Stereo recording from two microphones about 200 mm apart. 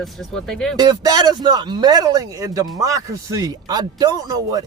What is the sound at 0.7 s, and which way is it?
Speech, 20° right (ahead or behind).